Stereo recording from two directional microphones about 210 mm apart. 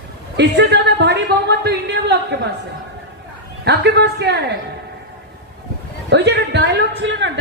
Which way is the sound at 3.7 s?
50° right (ahead or behind).